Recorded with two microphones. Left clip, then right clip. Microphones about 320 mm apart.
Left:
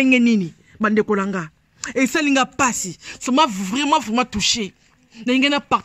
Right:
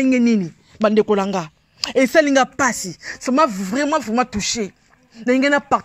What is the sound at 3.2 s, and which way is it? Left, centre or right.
A man's voice, centre.